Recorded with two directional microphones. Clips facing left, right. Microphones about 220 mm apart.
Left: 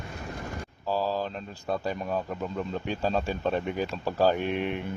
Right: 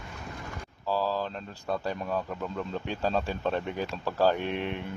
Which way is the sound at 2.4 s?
5° left (ahead or behind).